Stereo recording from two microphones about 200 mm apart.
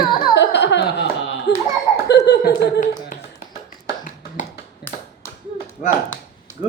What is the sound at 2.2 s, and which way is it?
Speech, 55° left (ahead or behind).